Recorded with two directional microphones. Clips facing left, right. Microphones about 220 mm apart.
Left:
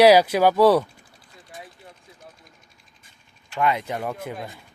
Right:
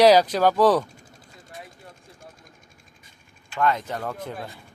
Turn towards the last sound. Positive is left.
turn(degrees=10)  # may be behind; listen again after turning